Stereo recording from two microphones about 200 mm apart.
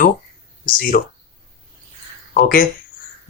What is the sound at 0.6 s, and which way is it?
Speech, 45° left (ahead or behind).